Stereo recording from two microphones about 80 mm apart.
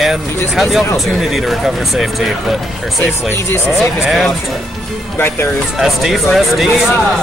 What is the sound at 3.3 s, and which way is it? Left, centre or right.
Speech, left.